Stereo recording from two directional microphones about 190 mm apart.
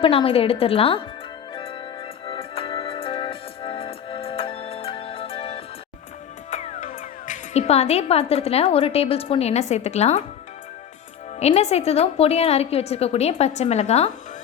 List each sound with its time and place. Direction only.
0.0 s a woman's voice: 30° left (ahead or behind)
1.5 s music: 30° left (ahead or behind)
6.5 s speech: 40° left (ahead or behind)
11.3 s a woman's voice: 35° left (ahead or behind)